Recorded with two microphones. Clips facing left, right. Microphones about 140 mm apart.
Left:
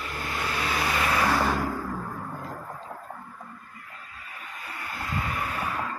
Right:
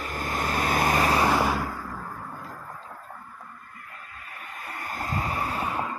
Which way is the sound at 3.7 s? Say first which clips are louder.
Right 1 dB; 55° right (ahead or behind).